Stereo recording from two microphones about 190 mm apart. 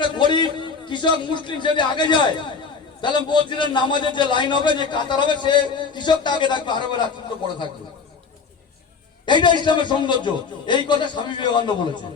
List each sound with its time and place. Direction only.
0.0 s a man's voice: 25° left (ahead or behind)
9.2 s a man's voice: 25° left (ahead or behind)